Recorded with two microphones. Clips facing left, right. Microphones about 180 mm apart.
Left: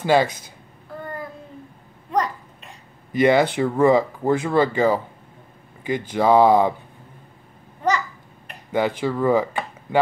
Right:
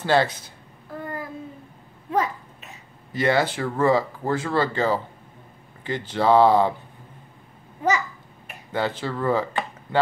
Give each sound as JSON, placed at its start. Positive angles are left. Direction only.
{"t": 0.0, "sound": "speech", "side_deg": 15}
{"t": 2.0, "sound": "babbling", "side_deg": -5}
{"t": 3.1, "sound": "speech", "side_deg": 20}
{"t": 8.7, "sound": "speech", "side_deg": 15}